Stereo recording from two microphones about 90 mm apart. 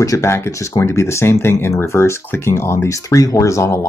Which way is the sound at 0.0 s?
35° left (ahead or behind).